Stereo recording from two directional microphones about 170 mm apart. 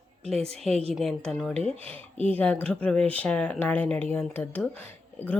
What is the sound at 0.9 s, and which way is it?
Speech, 5° left (ahead or behind).